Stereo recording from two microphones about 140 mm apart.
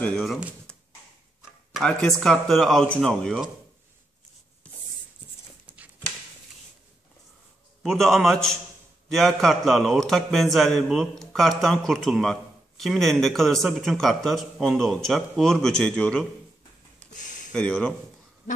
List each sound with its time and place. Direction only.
0.0 s a man's voice: 5° left (ahead or behind)
0.7 s a sound: 5° left (ahead or behind)
1.8 s a man's voice: 5° left (ahead or behind)
7.8 s a man's voice: centre (ahead or behind)
17.1 s a sound: 65° left (ahead or behind)
17.5 s speech: 5° left (ahead or behind)